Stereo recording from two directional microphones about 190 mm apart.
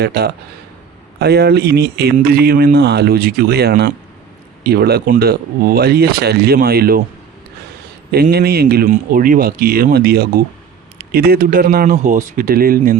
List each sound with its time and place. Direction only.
0.0 s speech: 55° right (ahead or behind)
8.1 s speech: 60° right (ahead or behind)